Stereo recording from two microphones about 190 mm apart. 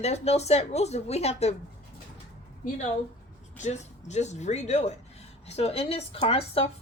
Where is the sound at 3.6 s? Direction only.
40° left (ahead or behind).